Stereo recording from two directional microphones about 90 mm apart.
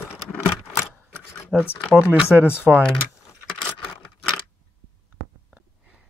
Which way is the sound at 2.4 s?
25° left (ahead or behind).